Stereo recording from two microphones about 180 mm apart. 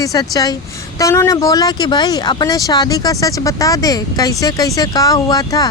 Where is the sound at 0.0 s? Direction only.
20° left (ahead or behind).